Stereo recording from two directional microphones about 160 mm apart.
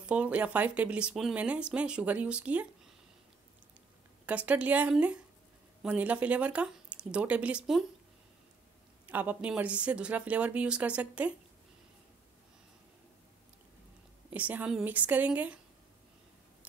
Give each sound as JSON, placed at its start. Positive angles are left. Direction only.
{"t": 0.0, "sound": "speech", "side_deg": -10}
{"t": 4.3, "sound": "speech", "side_deg": -10}
{"t": 9.0, "sound": "speech", "side_deg": -10}
{"t": 14.3, "sound": "speech", "side_deg": -10}